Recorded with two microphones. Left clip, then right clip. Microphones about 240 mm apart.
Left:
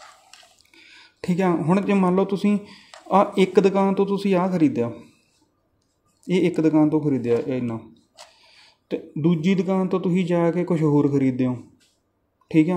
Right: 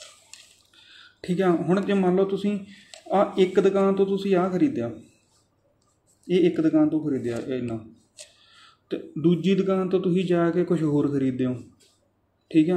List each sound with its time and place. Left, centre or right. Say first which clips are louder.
0.7 s drip: left 5 dB; left
1.4 s speech: left 1 dB; left
6.2 s speech: left 1 dB; left
8.6 s speech: left 3 dB; left